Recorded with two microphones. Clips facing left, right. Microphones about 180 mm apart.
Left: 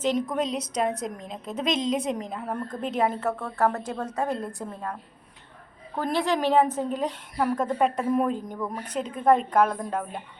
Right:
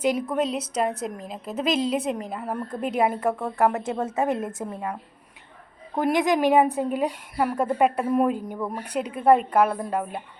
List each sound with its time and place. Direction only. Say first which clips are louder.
0.0 s a woman's voice: right 2 dB; 10° right (ahead or behind)